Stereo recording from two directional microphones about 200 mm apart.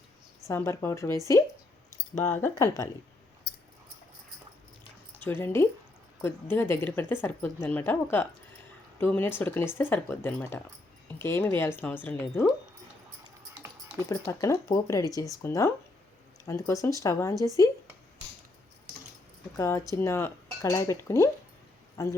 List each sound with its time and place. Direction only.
0.4 s speech: 15° left (ahead or behind)
3.5 s a sound: 55° left (ahead or behind)
5.2 s speech: 10° left (ahead or behind)
14.1 s speech: 15° left (ahead or behind)
19.5 s speech: 15° left (ahead or behind)